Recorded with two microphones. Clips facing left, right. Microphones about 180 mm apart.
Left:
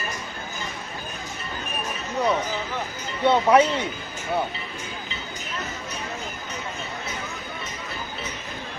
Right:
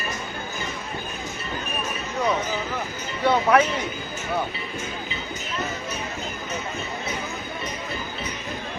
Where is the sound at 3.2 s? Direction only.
25° left (ahead or behind).